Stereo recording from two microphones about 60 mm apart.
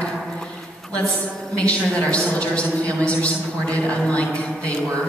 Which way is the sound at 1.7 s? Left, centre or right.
Centre.